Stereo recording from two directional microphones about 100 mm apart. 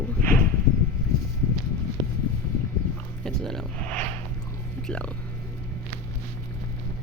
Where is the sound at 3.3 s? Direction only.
5° left (ahead or behind).